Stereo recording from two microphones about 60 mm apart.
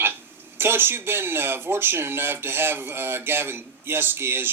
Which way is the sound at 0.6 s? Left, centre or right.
Right.